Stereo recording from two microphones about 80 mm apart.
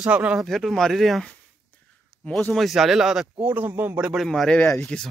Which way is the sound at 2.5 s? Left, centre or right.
Centre.